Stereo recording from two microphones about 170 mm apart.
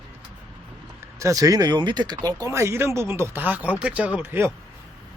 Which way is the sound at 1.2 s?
20° right (ahead or behind).